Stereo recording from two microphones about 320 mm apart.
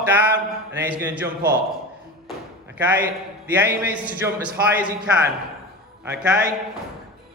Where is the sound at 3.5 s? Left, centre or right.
Centre.